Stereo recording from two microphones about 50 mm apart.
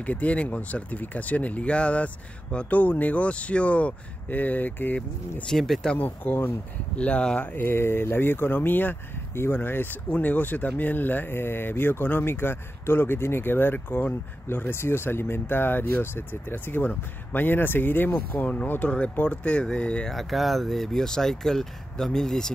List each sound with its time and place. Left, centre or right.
0.0 s speech: left
2.7 s speech: left
5.5 s speech: centre
5.9 s speech: left
7.0 s speech: left
7.5 s speech: left
9.3 s speech: left
10.0 s speech: left
20.1 s speech: centre